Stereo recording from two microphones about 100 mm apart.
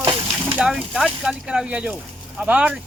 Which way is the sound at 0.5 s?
5° right (ahead or behind).